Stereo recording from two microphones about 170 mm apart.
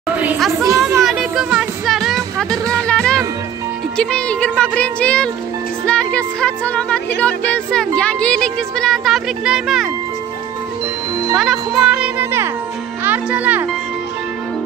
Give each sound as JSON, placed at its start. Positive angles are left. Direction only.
{"t": 0.5, "sound": "a sound", "side_deg": -20}
{"t": 1.0, "sound": "music", "side_deg": -5}
{"t": 3.9, "sound": "speech", "side_deg": 5}
{"t": 11.3, "sound": "speech", "side_deg": 0}
{"t": 13.0, "sound": "music", "side_deg": -10}